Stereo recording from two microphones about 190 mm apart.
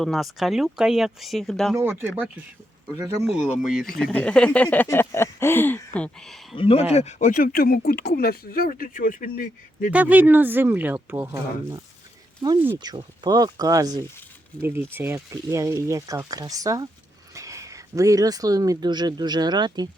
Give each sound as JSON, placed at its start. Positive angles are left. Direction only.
{"t": 0.0, "sound": "speech", "side_deg": 0}
{"t": 1.7, "sound": "speech", "side_deg": -10}
{"t": 6.6, "sound": "speech", "side_deg": 30}
{"t": 9.9, "sound": "speech", "side_deg": -10}
{"t": 12.5, "sound": "speech", "side_deg": -10}